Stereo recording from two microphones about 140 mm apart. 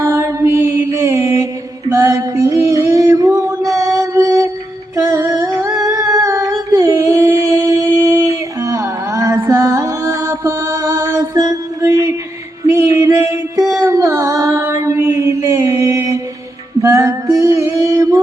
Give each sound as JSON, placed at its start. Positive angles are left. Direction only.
{"t": 0.0, "sound": "mantra", "side_deg": -20}
{"t": 1.9, "sound": "a sound", "side_deg": -25}
{"t": 5.0, "sound": "music", "side_deg": -25}
{"t": 5.8, "sound": "humming", "side_deg": -25}
{"t": 9.5, "sound": "music", "side_deg": -25}
{"t": 13.8, "sound": "a sound", "side_deg": -20}
{"t": 16.8, "sound": "music", "side_deg": -20}